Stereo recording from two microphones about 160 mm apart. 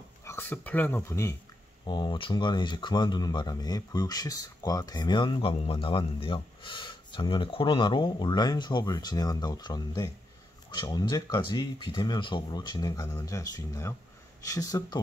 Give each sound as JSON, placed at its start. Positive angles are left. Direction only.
{"t": 0.2, "sound": "speech", "side_deg": 15}
{"t": 1.9, "sound": "speech", "side_deg": 30}